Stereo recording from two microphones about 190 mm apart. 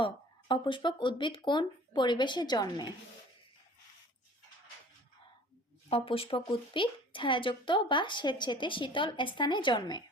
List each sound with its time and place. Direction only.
0.0 s a woman's voice: 25° left (ahead or behind)
5.9 s a woman's voice: 30° left (ahead or behind)